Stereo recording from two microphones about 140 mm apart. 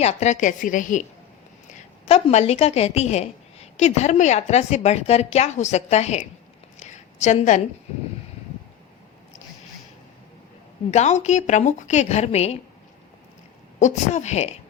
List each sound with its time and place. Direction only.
0.0 s a woman's voice: 50° left (ahead or behind)
2.0 s a woman's voice: 50° left (ahead or behind)
6.7 s a sound: 55° left (ahead or behind)
10.9 s a woman's voice: 55° left (ahead or behind)
13.7 s a woman's voice: 60° left (ahead or behind)